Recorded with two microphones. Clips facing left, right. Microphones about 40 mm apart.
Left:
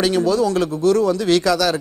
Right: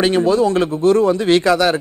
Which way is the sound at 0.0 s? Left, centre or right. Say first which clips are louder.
Right 3 dB; right.